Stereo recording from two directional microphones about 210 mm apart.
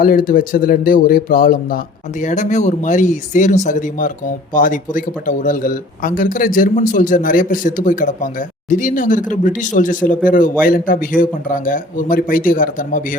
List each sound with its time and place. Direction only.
0.0 s speech: 40° left (ahead or behind)